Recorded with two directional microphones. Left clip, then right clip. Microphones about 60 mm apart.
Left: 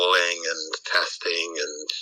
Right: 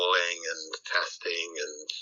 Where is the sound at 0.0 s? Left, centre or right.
Left.